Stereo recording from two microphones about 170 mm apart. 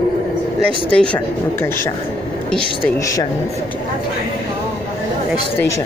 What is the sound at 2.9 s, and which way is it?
Speech, 20° left (ahead or behind).